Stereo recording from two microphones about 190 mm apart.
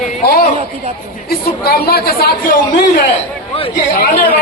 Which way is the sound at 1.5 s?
55° left (ahead or behind).